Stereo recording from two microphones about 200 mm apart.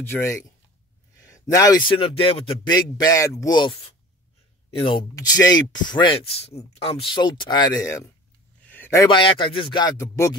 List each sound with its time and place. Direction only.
0.0 s speech: 10° left (ahead or behind)
4.8 s speech: 20° left (ahead or behind)
8.6 s a sound: 10° left (ahead or behind)
9.1 s speech: 25° left (ahead or behind)